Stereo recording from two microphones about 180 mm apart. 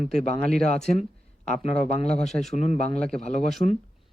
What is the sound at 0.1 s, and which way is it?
Speech, 55° right (ahead or behind).